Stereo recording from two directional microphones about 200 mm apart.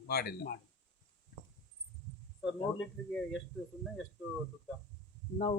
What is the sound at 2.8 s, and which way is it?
Speech, centre (ahead or behind).